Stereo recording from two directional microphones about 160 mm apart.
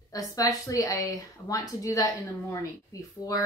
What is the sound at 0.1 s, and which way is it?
Speech, 20° left (ahead or behind).